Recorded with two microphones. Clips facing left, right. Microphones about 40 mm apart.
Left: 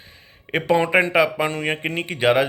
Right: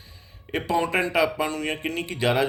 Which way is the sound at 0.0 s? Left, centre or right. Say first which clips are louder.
Left 3 dB; left.